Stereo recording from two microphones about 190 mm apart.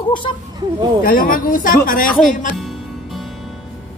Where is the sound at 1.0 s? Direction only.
45° left (ahead or behind).